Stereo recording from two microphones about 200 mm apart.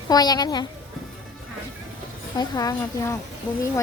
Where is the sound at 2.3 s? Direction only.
20° left (ahead or behind).